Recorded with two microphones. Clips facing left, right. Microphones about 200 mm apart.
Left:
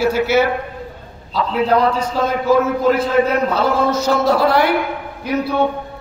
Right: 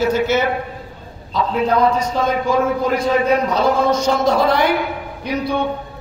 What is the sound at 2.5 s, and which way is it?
A man's voice, 5° left (ahead or behind).